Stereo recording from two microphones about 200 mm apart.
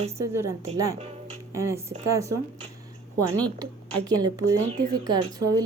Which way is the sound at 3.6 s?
20° right (ahead or behind).